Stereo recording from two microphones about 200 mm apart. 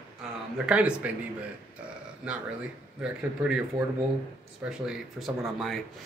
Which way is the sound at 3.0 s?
5° right (ahead or behind).